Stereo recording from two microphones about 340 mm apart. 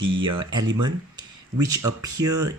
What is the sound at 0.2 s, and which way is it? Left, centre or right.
Speech, centre.